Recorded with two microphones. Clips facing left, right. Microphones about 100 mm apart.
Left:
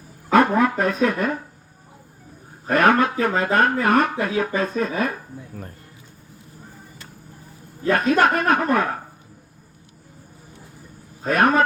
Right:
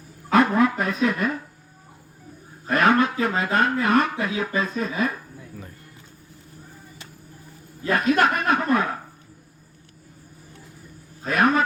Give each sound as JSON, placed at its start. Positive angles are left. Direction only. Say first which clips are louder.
{"t": 0.6, "sound": "speech", "louder": "left 2 dB", "side_deg": 40}
{"t": 2.6, "sound": "speech", "louder": "left 2 dB", "side_deg": 50}
{"t": 7.9, "sound": "speech", "louder": "left 2 dB", "side_deg": 45}
{"t": 11.2, "sound": "speech", "louder": "left 2 dB", "side_deg": 45}